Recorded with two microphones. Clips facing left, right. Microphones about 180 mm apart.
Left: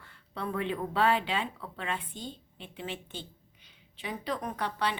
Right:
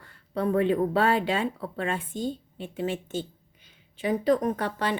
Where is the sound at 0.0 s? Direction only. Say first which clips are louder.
Right 9 dB; 40° right (ahead or behind).